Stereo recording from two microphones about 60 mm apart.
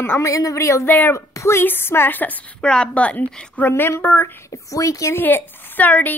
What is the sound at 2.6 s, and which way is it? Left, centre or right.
Speech, centre.